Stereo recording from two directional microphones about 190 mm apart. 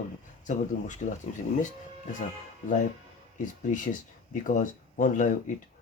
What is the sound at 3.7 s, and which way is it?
Speech, 40° left (ahead or behind).